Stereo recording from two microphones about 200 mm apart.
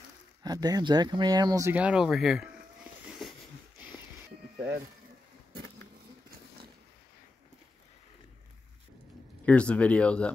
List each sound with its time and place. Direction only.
0.4 s speech: 20° right (ahead or behind); by 3.3 s centre (ahead or behind)
9.5 s speech: 5° left (ahead or behind)